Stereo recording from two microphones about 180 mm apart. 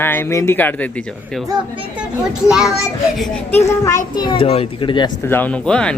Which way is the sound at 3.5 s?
15° left (ahead or behind).